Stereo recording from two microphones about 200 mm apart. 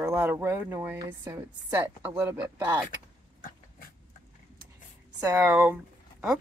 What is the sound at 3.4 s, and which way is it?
Dog, 45° left (ahead or behind).